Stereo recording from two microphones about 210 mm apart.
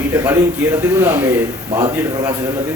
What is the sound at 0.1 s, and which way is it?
A man's voice, 10° right (ahead or behind).